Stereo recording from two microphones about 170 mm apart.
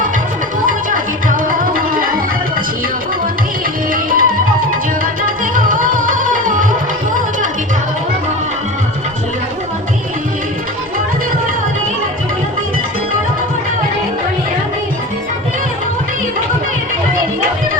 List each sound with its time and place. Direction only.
0.7 s music: 50° right (ahead or behind)
4.1 s tabla: 55° right (ahead or behind)
5.2 s music: 55° right (ahead or behind)